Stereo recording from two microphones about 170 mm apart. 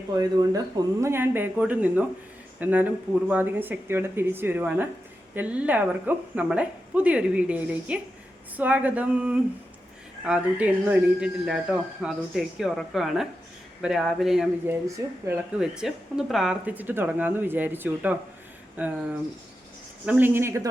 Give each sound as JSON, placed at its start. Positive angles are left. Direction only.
{"t": 0.2, "sound": "a woman's voice", "side_deg": -20}
{"t": 14.8, "sound": "speech", "side_deg": -20}
{"t": 15.6, "sound": "a woman's voice", "side_deg": -5}
{"t": 20.1, "sound": "a woman's voice", "side_deg": -10}